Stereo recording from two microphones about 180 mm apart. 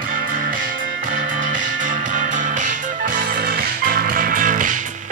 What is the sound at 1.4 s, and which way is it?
Music, 45° right (ahead or behind).